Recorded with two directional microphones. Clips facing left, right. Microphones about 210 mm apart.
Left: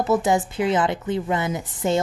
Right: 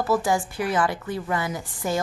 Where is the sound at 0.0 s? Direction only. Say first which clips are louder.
Left 3 dB; 20° left (ahead or behind).